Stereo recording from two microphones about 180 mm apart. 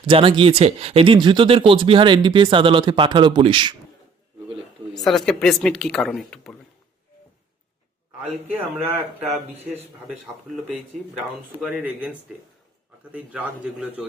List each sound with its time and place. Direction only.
0.0 s speech: 30° right (ahead or behind)
4.9 s speech: centre (ahead or behind)
8.2 s speech: centre (ahead or behind)
11.5 s a man's voice: 5° right (ahead or behind)
13.1 s a man's voice: 5° right (ahead or behind)